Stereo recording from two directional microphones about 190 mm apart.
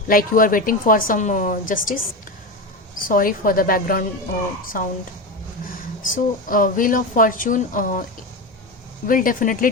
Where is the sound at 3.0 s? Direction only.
45° left (ahead or behind).